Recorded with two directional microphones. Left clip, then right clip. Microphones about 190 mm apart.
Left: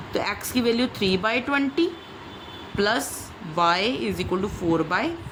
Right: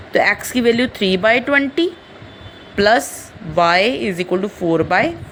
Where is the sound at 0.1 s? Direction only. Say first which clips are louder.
Right 11 dB; 25° right (ahead or behind).